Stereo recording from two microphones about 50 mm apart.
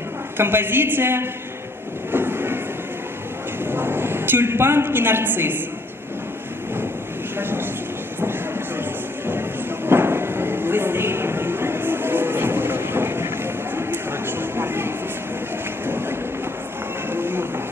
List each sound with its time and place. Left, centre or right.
0.4 s a woman's voice: right
2.1 s train: right
3.6 s a woman's voice: right
7.3 s vehicle: right
8.2 s train: right
9.8 s a sound: right